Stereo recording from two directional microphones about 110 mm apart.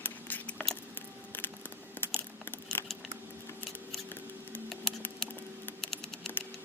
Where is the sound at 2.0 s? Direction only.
20° left (ahead or behind).